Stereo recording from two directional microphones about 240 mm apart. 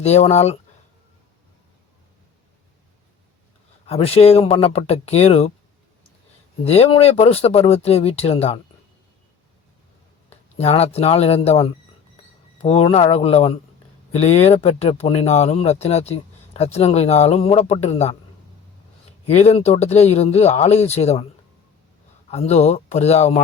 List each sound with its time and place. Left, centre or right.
0.0 s speech: left
3.8 s speech: left
6.7 s speech: left
10.2 s speech: left
19.2 s speech: left
22.3 s speech: left